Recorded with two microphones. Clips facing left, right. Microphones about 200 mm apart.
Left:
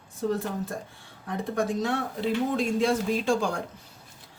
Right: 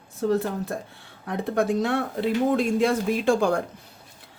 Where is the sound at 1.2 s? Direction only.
65° right (ahead or behind).